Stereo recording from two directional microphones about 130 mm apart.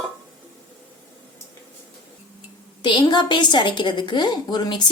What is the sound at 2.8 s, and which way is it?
A woman's voice, 35° left (ahead or behind).